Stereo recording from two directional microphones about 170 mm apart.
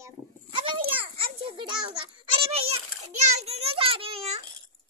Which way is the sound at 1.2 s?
30° right (ahead or behind).